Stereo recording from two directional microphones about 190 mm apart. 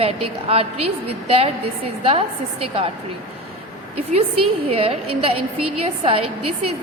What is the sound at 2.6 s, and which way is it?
Speech, 30° right (ahead or behind).